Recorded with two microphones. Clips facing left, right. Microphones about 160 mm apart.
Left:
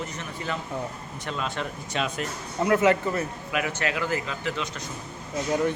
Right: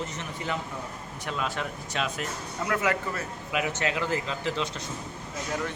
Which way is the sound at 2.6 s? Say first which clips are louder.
Left 7 dB; 25° left (ahead or behind).